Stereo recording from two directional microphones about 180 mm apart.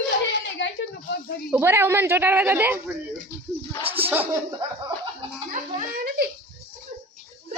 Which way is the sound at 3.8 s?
30° right (ahead or behind).